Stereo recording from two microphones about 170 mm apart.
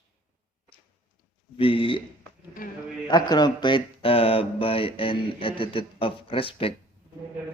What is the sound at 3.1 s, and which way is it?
Speech, 25° left (ahead or behind).